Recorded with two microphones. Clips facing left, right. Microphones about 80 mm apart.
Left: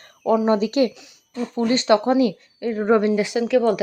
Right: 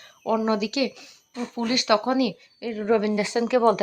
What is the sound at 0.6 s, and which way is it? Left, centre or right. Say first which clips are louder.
Speech: left 6 dB; left.